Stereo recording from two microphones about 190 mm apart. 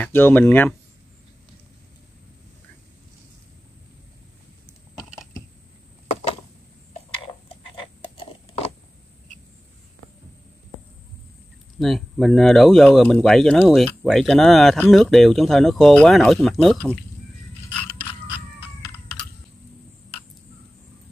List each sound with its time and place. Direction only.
0.0 s speech: 10° left (ahead or behind)
11.8 s speech: centre (ahead or behind)
17.9 s a sound: 25° left (ahead or behind)